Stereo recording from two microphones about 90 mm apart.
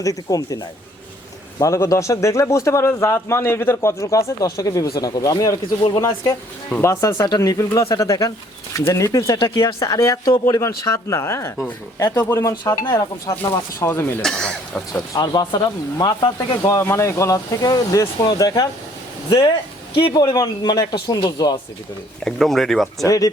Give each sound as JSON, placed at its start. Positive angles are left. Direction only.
{"t": 0.0, "sound": "a man's voice", "side_deg": 40}
{"t": 1.6, "sound": "a man's voice", "side_deg": 35}
{"t": 7.3, "sound": "a man's voice", "side_deg": 45}
{"t": 9.8, "sound": "a man's voice", "side_deg": 40}
{"t": 14.2, "sound": "speech", "side_deg": 5}
{"t": 15.1, "sound": "speech", "side_deg": 45}
{"t": 16.6, "sound": "a man's voice", "side_deg": 30}
{"t": 22.2, "sound": "speech", "side_deg": 5}
{"t": 23.0, "sound": "a man's voice", "side_deg": 40}